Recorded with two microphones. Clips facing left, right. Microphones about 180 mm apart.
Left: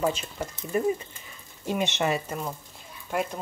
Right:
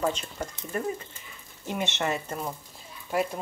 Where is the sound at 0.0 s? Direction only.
10° left (ahead or behind).